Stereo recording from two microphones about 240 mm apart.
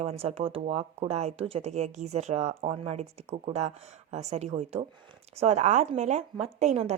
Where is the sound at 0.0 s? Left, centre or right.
Right.